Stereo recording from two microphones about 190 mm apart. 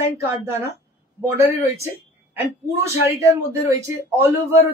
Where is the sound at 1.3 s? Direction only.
15° right (ahead or behind).